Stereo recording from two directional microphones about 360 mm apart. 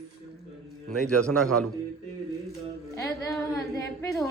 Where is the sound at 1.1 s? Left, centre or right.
Centre.